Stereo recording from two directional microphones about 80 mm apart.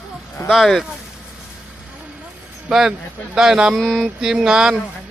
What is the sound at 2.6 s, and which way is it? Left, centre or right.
Speech, centre.